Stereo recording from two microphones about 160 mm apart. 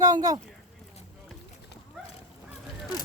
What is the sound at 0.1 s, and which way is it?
Speech, 25° right (ahead or behind).